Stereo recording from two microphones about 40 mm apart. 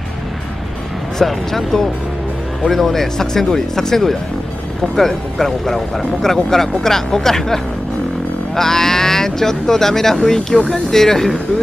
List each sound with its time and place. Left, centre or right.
1.1 s speech: centre